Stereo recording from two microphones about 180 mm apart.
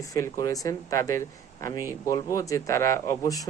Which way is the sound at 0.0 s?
20° left (ahead or behind).